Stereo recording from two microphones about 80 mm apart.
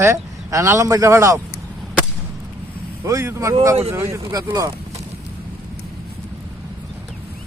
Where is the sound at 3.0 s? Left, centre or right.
Right.